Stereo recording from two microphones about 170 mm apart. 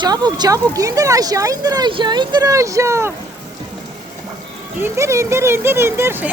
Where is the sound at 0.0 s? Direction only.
25° right (ahead or behind).